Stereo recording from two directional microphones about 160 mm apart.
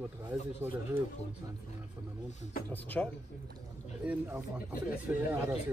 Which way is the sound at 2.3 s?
45° left (ahead or behind).